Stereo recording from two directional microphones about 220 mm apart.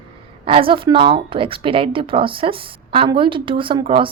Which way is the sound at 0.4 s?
25° right (ahead or behind).